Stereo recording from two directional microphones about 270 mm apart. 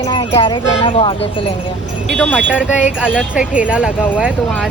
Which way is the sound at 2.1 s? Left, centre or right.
Centre.